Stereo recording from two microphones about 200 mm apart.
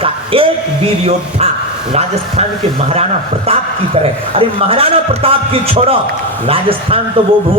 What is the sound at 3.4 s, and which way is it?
A man's voice, 30° right (ahead or behind).